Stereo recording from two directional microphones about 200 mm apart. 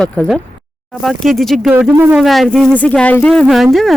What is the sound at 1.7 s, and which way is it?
Speech, 10° right (ahead or behind).